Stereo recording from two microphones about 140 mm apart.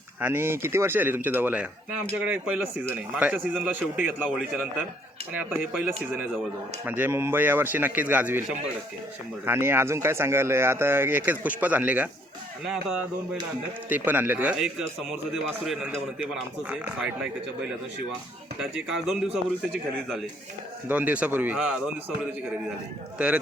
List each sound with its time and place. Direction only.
0.2 s a man's voice: 15° right (ahead or behind)
6.8 s a man's voice: 15° right (ahead or behind)
18.6 s a man's voice: centre (ahead or behind)
20.8 s speech: 10° right (ahead or behind)
23.1 s speech: 10° right (ahead or behind)